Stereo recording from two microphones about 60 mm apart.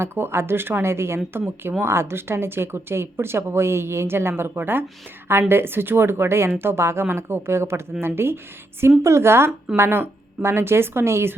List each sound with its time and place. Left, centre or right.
0.0 s speech: right